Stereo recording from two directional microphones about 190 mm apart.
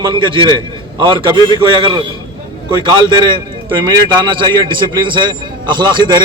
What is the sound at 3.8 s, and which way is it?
A man's voice, 25° right (ahead or behind).